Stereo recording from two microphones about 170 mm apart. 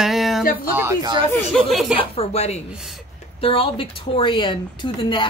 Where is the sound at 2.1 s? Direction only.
35° left (ahead or behind).